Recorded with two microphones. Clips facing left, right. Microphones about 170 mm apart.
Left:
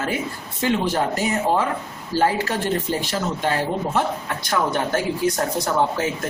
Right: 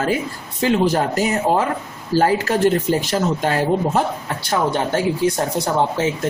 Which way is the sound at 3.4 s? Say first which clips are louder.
Right 4 dB; 45° right (ahead or behind).